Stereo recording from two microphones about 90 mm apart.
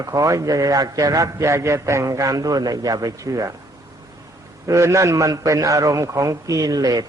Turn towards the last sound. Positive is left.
turn(degrees=-45)  # may be behind; listen again after turning